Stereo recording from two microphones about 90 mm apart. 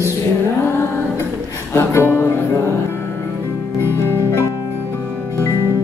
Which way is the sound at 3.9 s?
30° left (ahead or behind).